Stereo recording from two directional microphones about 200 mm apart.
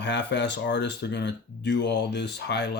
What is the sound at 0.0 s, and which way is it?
Speech, 60° left (ahead or behind).